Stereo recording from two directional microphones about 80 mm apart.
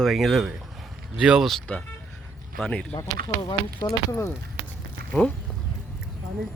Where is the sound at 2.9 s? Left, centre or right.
Left.